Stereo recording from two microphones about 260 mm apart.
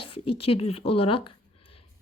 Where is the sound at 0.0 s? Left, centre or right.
Left.